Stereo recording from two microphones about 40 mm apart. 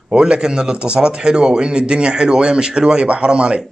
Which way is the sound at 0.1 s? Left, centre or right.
Right.